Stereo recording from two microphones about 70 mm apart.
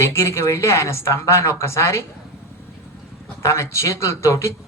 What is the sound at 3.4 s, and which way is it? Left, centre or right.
Speech, left.